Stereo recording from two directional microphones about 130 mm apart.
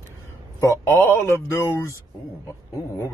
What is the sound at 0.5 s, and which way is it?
A man's voice, 20° left (ahead or behind).